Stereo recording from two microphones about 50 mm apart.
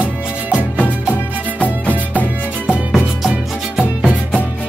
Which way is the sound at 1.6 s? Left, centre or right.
Left.